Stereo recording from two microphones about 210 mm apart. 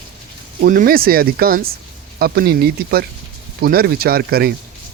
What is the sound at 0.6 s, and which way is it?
Speech, 40° right (ahead or behind).